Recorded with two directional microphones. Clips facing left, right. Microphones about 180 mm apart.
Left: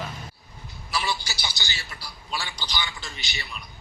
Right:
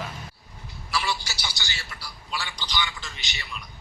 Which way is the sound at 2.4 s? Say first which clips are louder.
Even; 10° left (ahead or behind).